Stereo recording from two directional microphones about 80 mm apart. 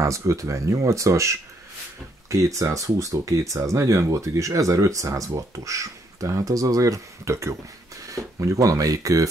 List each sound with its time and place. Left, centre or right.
0.0 s speech: right